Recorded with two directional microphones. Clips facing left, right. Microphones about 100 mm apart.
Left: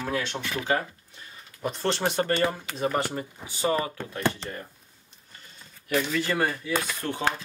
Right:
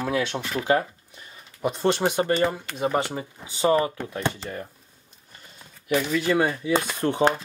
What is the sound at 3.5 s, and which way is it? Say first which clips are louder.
Speech: right 5 dB; 25° right (ahead or behind).